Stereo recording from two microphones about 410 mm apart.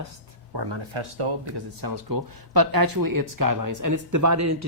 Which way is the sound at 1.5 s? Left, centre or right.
Right.